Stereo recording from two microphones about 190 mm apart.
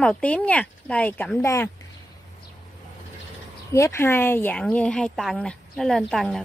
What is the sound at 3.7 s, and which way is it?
A woman's voice, 15° left (ahead or behind).